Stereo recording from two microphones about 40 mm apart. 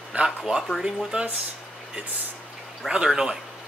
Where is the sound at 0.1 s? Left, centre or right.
Right.